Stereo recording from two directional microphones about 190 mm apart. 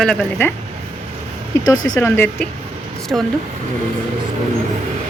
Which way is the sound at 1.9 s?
10° left (ahead or behind).